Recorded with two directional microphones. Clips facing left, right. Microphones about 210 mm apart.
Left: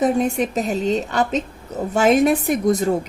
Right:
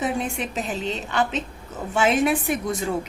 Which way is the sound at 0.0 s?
40° left (ahead or behind).